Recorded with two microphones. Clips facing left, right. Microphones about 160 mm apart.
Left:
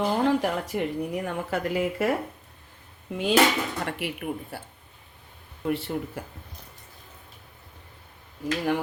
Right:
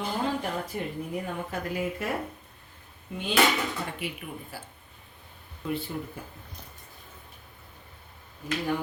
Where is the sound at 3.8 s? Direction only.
65° left (ahead or behind).